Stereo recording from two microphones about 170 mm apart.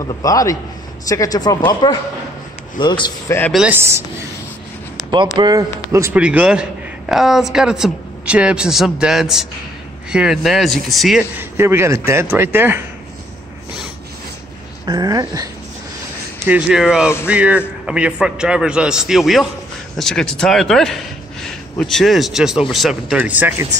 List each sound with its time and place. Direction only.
0.0 s speech: 20° left (ahead or behind)
3.3 s speech: 10° left (ahead or behind)
3.5 s speech: 10° right (ahead or behind)
5.4 s a man's voice: 20° right (ahead or behind)
14.9 s speech: 20° right (ahead or behind)
16.4 s a man's voice: 5° right (ahead or behind)